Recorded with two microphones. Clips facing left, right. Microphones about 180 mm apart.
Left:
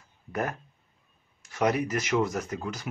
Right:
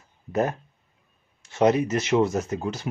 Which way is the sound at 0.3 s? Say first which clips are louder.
Right 7 dB; 25° right (ahead or behind).